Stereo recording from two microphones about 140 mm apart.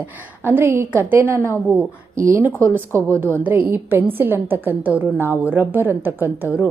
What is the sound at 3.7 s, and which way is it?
A woman's voice, 15° right (ahead or behind).